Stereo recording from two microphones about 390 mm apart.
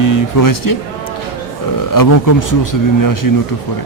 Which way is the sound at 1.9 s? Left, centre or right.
Left.